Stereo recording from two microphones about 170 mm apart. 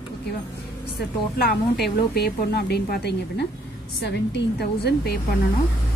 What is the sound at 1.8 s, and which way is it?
A woman's voice, 70° left (ahead or behind).